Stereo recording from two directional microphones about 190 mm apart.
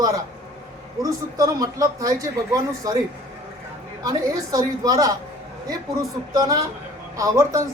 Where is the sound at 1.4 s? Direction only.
20° right (ahead or behind).